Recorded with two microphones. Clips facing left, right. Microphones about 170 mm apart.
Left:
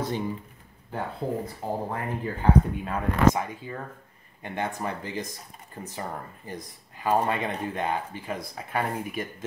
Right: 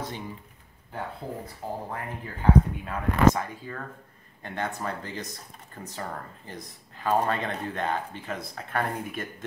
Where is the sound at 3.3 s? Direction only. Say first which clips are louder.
Left 2 dB; 20° left (ahead or behind).